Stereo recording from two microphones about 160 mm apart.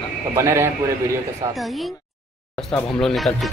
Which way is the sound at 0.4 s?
15° right (ahead or behind).